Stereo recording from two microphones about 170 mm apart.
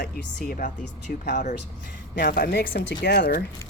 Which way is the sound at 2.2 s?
65° left (ahead or behind).